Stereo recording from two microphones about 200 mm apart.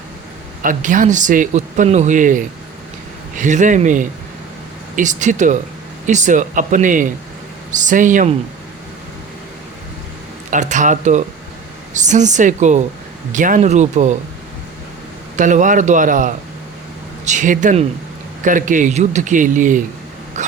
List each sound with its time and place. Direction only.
0.6 s speech: 40° right (ahead or behind)
10.5 s speech: 40° right (ahead or behind)
15.4 s speech: 40° right (ahead or behind)